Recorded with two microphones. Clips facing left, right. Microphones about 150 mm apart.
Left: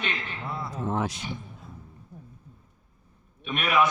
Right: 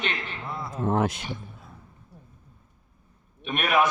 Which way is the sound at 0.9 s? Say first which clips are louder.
Right 5 dB; 55° right (ahead or behind).